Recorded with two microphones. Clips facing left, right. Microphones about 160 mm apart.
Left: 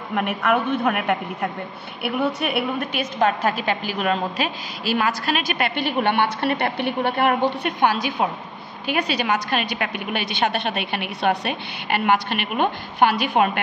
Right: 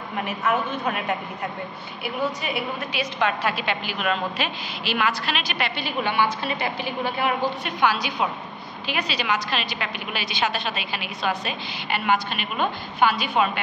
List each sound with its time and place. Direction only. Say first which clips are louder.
0.1 s a woman's voice: left 4 dB; 60° left (ahead or behind)